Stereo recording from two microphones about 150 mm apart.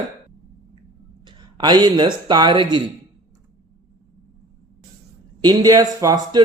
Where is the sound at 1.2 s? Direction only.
30° right (ahead or behind).